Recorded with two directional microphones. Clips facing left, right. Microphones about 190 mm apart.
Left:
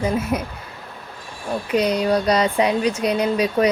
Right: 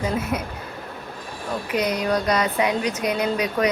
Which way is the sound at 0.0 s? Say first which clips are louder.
Left 3 dB; 30° left (ahead or behind).